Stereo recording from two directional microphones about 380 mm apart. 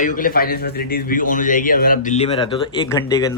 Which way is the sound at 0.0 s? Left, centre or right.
Left.